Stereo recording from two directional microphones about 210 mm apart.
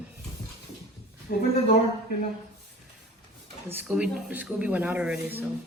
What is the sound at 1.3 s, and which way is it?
Speech, 45° left (ahead or behind).